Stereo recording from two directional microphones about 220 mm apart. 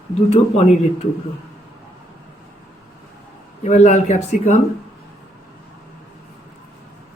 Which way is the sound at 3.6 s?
30° left (ahead or behind).